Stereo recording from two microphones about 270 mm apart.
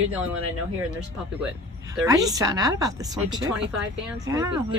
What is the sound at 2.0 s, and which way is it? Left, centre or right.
Speech, centre.